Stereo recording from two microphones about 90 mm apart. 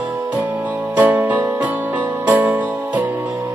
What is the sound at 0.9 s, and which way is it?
Music, 20° right (ahead or behind).